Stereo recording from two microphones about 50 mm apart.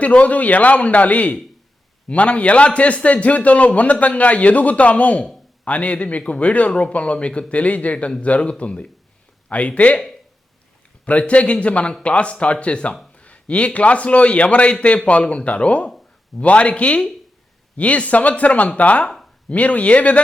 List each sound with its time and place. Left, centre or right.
0.0 s a man's voice: left
11.0 s a man's voice: left